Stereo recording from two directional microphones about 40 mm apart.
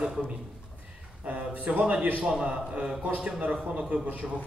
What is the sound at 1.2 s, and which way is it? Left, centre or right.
A man's voice, right.